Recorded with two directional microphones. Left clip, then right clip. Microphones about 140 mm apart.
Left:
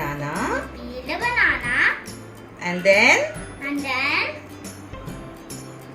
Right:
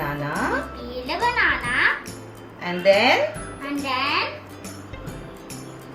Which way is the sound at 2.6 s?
30° left (ahead or behind).